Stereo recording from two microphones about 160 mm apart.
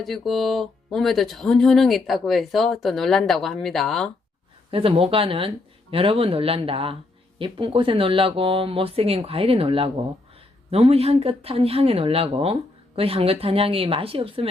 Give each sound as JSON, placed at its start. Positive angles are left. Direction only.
{"t": 0.0, "sound": "speech", "side_deg": 0}
{"t": 4.7, "sound": "speech", "side_deg": -35}